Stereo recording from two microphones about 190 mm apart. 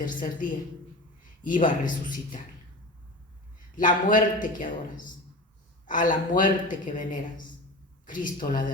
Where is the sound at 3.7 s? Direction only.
45° left (ahead or behind).